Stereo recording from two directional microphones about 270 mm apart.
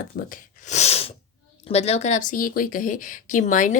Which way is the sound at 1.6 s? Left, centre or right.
Left.